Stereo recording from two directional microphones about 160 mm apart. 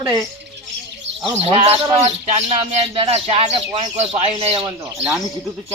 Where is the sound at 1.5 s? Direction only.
40° right (ahead or behind).